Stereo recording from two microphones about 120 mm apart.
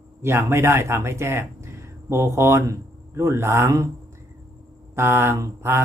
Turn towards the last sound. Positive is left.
turn(degrees=-20)  # may be behind; listen again after turning